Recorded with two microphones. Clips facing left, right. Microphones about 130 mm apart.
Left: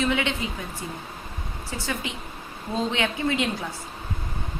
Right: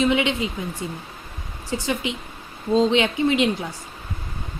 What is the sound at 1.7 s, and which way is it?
A woman's voice, 20° right (ahead or behind).